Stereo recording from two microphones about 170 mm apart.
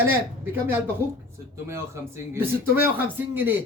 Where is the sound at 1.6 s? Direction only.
15° right (ahead or behind).